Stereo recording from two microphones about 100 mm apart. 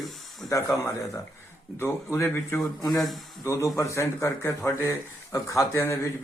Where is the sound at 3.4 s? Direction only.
25° left (ahead or behind).